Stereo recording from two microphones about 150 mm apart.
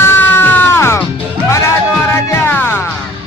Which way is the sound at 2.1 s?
15° left (ahead or behind).